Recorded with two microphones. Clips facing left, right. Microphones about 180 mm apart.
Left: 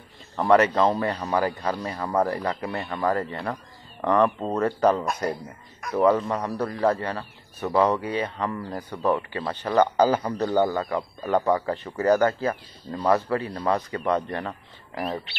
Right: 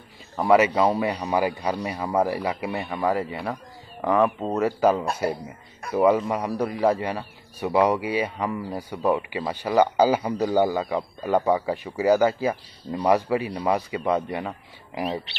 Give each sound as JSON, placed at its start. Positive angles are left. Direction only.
{"t": 0.4, "sound": "a man's voice", "side_deg": -10}